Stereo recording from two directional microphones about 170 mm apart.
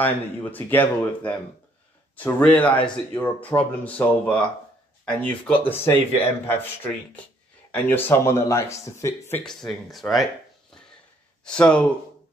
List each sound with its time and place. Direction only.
0.0 s speech: 10° left (ahead or behind)
9.4 s speech: 5° left (ahead or behind)
11.4 s speech: 5° left (ahead or behind)